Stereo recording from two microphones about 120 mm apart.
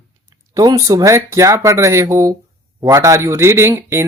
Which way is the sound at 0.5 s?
30° right (ahead or behind).